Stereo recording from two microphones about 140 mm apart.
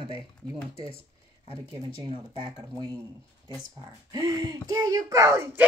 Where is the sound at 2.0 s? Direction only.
35° right (ahead or behind).